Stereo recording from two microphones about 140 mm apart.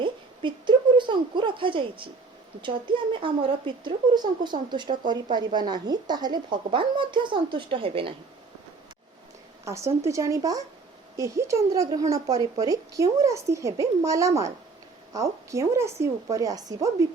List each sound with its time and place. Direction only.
0.0 s a sound: 35° right (ahead or behind)
2.6 s speech: 35° right (ahead or behind)
9.6 s a woman's voice: 20° right (ahead or behind)